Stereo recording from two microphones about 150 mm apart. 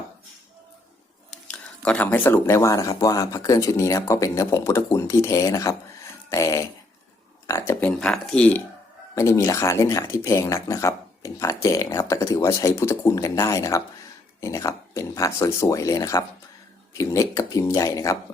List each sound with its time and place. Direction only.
1.5 s speech: 10° left (ahead or behind)
9.1 s speech: 20° left (ahead or behind)